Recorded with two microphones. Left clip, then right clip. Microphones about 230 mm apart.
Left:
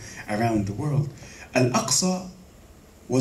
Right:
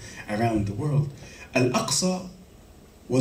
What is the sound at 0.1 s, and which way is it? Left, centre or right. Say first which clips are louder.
Speech: left 1 dB; right.